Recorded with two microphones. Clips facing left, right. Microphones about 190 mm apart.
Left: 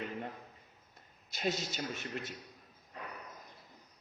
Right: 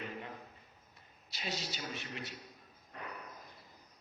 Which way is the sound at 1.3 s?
50° left (ahead or behind).